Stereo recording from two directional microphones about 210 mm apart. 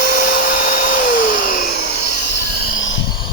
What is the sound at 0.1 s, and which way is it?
Vacuum cleaner, 35° left (ahead or behind).